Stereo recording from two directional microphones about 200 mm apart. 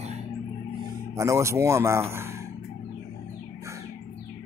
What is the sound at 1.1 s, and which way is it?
Speech, 15° right (ahead or behind).